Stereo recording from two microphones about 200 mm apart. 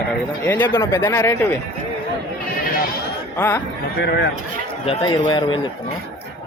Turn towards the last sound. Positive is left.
turn(degrees=25)  # may be behind; listen again after turning